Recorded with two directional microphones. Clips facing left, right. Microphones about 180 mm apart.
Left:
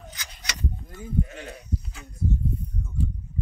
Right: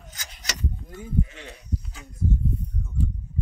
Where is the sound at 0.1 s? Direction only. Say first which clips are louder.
Right 1 dB; 45° right (ahead or behind).